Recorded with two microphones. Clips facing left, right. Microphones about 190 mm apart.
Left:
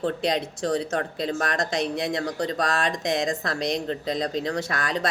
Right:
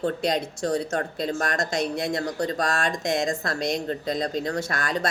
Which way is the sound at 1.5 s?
45° right (ahead or behind).